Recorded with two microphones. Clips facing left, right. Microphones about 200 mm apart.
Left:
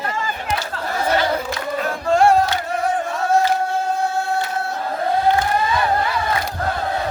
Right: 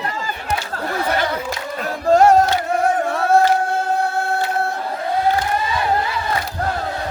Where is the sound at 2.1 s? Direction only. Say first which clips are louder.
Right 3 dB; 40° right (ahead or behind).